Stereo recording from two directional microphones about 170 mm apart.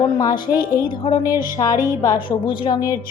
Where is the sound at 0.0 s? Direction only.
20° left (ahead or behind).